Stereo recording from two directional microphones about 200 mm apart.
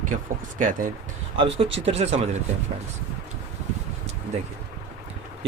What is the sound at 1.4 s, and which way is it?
Speech, 30° right (ahead or behind).